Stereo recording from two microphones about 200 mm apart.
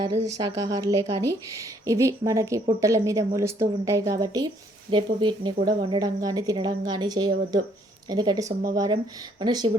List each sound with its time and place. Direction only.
0.3 s a woman's voice: 15° right (ahead or behind)